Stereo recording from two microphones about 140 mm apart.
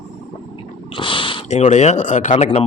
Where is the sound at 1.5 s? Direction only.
55° left (ahead or behind).